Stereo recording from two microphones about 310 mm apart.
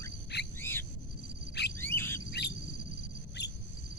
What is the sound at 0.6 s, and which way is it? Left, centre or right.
Cricket, centre.